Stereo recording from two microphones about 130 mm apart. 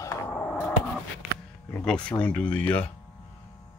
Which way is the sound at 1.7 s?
10° left (ahead or behind).